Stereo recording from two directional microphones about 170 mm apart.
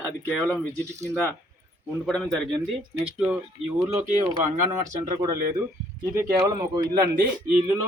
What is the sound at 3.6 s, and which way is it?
Speech, 35° right (ahead or behind).